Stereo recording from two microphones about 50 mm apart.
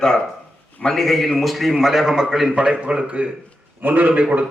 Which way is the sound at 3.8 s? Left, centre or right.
Right.